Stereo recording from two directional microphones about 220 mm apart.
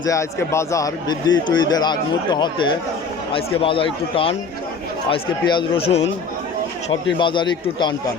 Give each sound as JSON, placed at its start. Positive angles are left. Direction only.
{"t": 0.1, "sound": "speech", "side_deg": 15}
{"t": 7.2, "sound": "speech", "side_deg": 20}